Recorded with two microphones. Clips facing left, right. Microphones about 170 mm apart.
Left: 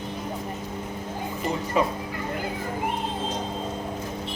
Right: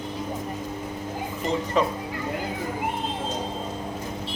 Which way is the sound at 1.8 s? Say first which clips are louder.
Even; 10° left (ahead or behind).